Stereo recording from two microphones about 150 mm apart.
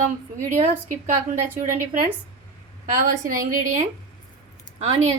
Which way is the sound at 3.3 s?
65° right (ahead or behind).